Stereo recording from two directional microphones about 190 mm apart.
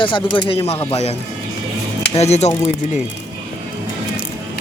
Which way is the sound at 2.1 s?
35° left (ahead or behind).